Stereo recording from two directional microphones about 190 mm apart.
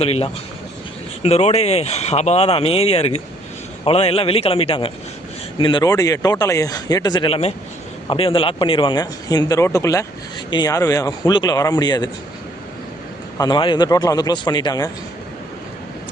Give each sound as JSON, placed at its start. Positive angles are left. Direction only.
{"t": 0.0, "sound": "speech", "side_deg": 30}
{"t": 13.4, "sound": "speech", "side_deg": 25}